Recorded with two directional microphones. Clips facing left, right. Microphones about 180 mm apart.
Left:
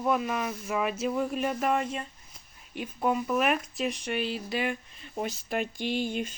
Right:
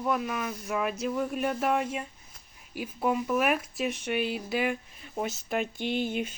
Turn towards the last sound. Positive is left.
turn(degrees=-5)  # may be behind; listen again after turning